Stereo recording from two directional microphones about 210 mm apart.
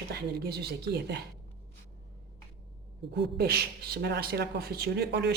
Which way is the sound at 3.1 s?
50° right (ahead or behind).